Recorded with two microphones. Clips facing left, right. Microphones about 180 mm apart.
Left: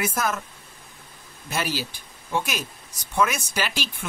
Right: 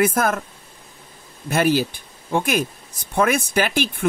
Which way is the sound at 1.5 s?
55° right (ahead or behind).